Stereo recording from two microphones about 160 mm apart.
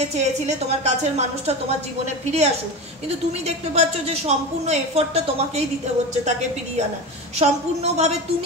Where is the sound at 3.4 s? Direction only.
40° right (ahead or behind).